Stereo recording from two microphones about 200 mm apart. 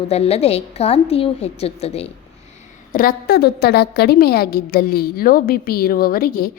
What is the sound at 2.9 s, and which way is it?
A woman's voice, 45° left (ahead or behind).